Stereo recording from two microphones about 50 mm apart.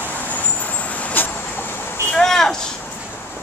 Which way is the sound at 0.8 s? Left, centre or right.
Left.